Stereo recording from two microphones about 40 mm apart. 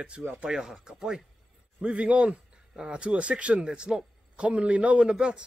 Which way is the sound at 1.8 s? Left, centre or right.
Right.